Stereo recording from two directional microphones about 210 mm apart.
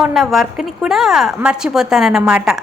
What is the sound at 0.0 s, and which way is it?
A woman's voice, centre (ahead or behind).